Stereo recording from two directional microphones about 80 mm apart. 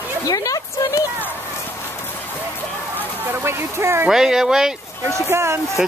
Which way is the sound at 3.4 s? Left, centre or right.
Right.